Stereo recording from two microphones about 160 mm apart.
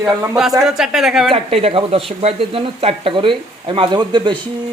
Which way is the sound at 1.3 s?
35° right (ahead or behind).